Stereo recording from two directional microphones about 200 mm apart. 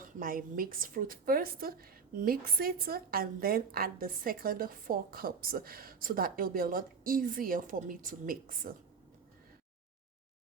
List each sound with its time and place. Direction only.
0.0 s a woman's voice: 45° right (ahead or behind)